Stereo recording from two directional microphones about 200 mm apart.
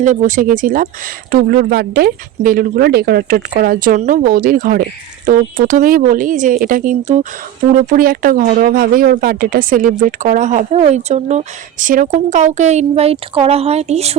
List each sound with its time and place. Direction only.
0.0 s speech: 40° right (ahead or behind)